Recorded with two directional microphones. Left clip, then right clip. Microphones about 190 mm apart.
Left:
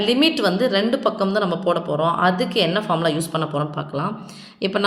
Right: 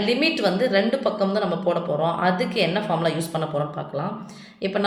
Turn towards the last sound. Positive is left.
turn(degrees=45)  # may be behind; listen again after turning